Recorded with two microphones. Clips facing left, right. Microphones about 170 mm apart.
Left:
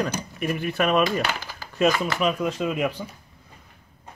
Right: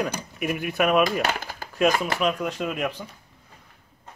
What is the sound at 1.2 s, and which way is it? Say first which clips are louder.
Speech: right 2 dB; 50° right (ahead or behind).